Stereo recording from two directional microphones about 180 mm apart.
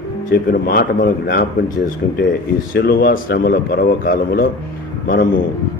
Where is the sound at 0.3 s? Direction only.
55° left (ahead or behind).